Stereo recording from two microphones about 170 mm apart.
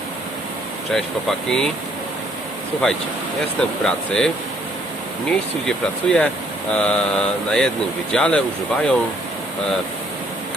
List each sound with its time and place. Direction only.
0.9 s mantra: 5° left (ahead or behind)
2.8 s mantra: 5° left (ahead or behind)
5.6 s mantra: 5° left (ahead or behind)